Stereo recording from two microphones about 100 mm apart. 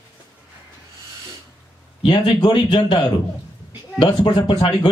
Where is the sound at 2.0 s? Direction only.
50° left (ahead or behind).